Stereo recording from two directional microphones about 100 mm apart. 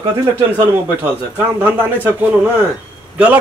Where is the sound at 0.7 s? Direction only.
20° right (ahead or behind).